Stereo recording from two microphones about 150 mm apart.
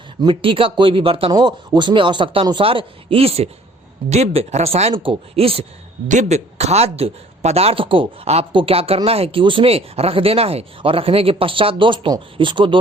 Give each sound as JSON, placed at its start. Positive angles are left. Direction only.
{"t": 0.2, "sound": "speech", "side_deg": -35}
{"t": 6.1, "sound": "speech", "side_deg": -50}